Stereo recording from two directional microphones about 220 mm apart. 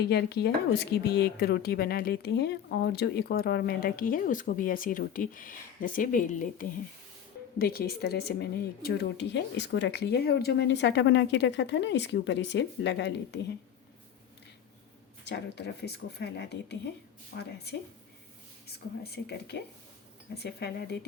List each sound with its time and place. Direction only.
0.0 s a woman's voice: 45° left (ahead or behind)
15.2 s a woman's voice: 50° left (ahead or behind)
19.1 s a woman's voice: 50° left (ahead or behind)